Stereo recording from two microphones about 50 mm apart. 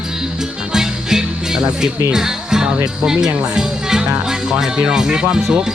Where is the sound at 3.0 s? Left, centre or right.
Centre.